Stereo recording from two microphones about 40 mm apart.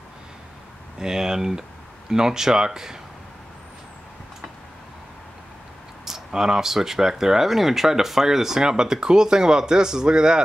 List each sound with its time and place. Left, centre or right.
0.9 s speech: centre
6.0 s speech: centre